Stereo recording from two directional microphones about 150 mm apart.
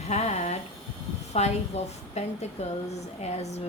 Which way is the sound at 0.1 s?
45° left (ahead or behind).